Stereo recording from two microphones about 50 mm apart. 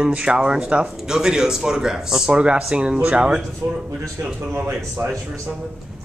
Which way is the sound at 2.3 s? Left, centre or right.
Right.